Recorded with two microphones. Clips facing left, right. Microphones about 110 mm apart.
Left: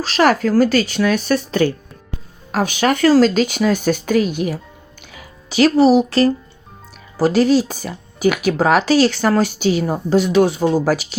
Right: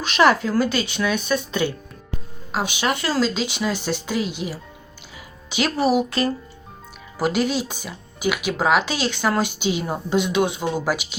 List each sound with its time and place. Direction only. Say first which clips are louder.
0.0 s speech: left 2 dB; 40° left (ahead or behind)
5.5 s speech: left 8 dB; 40° left (ahead or behind)